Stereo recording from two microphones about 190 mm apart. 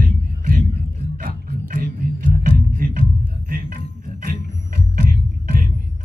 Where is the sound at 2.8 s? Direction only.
45° right (ahead or behind).